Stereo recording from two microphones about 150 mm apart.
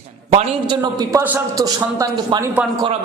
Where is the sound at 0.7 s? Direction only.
25° right (ahead or behind).